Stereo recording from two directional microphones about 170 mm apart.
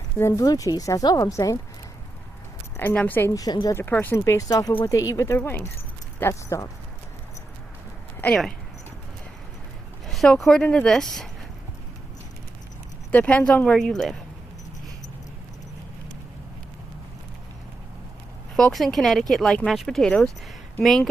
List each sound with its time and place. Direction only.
0.2 s speech: 15° left (ahead or behind)
2.7 s speech: 10° left (ahead or behind)
8.2 s speech: 5° left (ahead or behind)
10.1 s speech: centre (ahead or behind)
13.1 s speech: 10° left (ahead or behind)
18.5 s speech: centre (ahead or behind)